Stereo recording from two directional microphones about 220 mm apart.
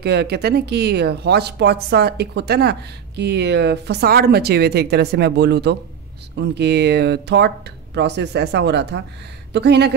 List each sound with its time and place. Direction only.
0.0 s speech: 45° right (ahead or behind)